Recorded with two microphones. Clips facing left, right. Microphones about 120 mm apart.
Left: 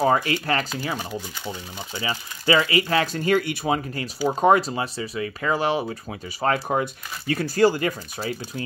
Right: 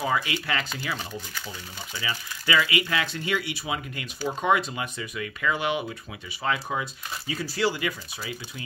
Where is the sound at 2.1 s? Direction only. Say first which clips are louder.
Left 5 dB; 35° left (ahead or behind).